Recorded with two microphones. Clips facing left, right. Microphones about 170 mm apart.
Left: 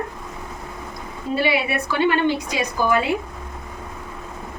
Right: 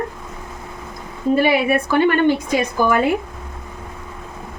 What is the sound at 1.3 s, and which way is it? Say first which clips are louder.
A woman's voice: right 6 dB; 45° right (ahead or behind).